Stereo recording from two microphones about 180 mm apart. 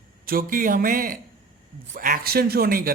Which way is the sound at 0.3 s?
50° right (ahead or behind).